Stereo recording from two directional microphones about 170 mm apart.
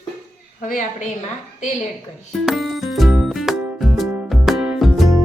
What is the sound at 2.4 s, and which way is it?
Music, centre (ahead or behind).